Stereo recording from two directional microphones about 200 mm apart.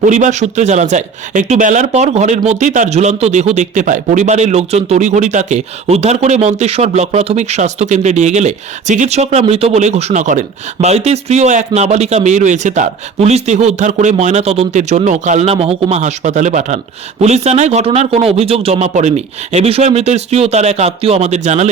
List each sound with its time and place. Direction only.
0.0 s speech: 40° right (ahead or behind)